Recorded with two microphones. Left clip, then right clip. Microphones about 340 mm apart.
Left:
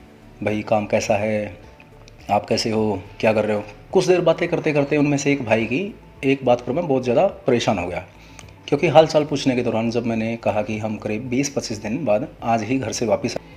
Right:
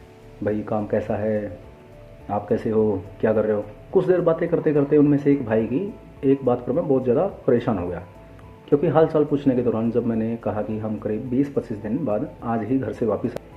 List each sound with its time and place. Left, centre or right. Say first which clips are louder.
0.4 s speech: left 4 dB; left